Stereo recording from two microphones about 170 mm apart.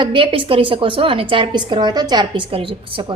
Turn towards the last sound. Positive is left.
turn(degrees=-30)  # may be behind; listen again after turning